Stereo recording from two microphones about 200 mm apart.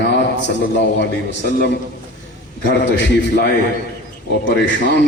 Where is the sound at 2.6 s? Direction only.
60° left (ahead or behind).